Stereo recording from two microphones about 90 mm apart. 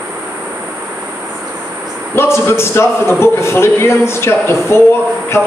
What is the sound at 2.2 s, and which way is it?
A man's voice, 30° left (ahead or behind).